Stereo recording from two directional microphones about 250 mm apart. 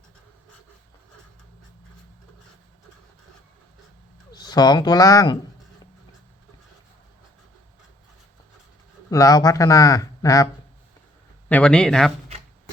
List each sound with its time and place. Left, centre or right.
4.3 s speech: centre
9.0 s speech: centre